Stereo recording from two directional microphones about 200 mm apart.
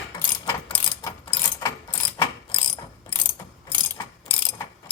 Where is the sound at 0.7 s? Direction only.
25° left (ahead or behind).